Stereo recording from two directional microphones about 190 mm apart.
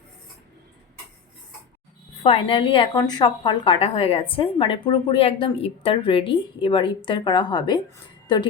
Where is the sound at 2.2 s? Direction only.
30° left (ahead or behind).